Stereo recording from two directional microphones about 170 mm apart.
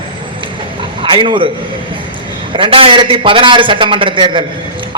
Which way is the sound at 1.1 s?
30° right (ahead or behind).